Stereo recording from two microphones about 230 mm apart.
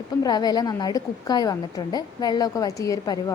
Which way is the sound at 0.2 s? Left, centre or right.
Centre.